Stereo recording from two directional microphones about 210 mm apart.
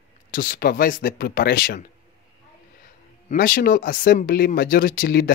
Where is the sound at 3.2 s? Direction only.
40° left (ahead or behind).